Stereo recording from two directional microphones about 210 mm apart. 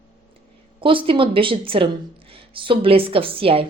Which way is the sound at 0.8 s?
25° right (ahead or behind).